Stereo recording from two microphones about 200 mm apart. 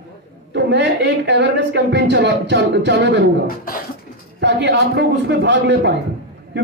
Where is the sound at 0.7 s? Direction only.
60° right (ahead or behind).